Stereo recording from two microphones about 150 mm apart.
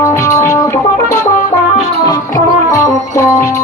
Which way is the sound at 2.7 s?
20° left (ahead or behind).